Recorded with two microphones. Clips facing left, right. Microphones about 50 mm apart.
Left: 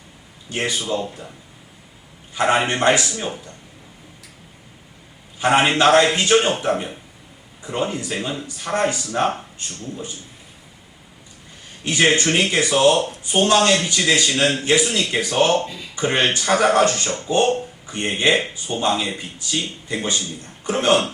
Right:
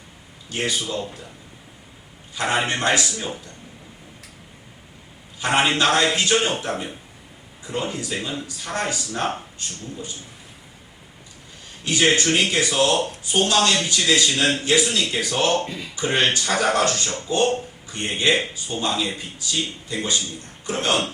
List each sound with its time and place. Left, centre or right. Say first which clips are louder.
0.5 s speech: left 2 dB; left
2.3 s speech: left 4 dB; left
5.4 s speech: left 4 dB; left
11.9 s speech: left 2 dB; left